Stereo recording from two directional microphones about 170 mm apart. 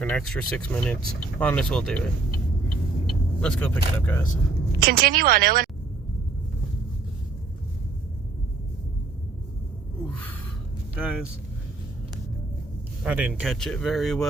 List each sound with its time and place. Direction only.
0.0 s speech: 5° left (ahead or behind)
3.4 s speech: 5° left (ahead or behind)
4.8 s speech: 60° right (ahead or behind)
10.9 s speech: 5° right (ahead or behind)
13.0 s speech: 10° right (ahead or behind)
13.5 s speech: 5° left (ahead or behind)